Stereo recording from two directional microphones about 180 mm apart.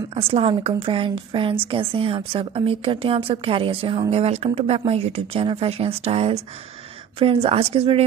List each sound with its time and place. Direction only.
0.1 s a woman's voice: 30° right (ahead or behind)
7.4 s a woman's voice: 35° right (ahead or behind)